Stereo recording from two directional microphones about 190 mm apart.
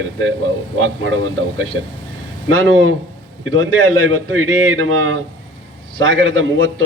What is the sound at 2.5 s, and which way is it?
A man's voice, 90° right.